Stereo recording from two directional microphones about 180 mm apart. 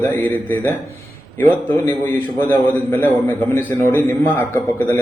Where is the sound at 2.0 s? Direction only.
10° left (ahead or behind).